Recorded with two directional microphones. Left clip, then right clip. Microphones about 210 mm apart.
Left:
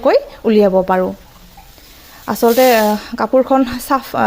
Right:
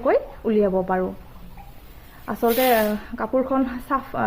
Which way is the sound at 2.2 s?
45° left (ahead or behind).